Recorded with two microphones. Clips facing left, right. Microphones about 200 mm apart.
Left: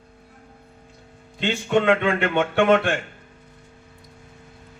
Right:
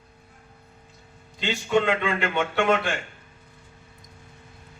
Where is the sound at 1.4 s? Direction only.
55° left (ahead or behind).